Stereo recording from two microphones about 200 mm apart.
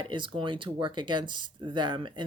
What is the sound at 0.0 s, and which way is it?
Speech, 25° right (ahead or behind).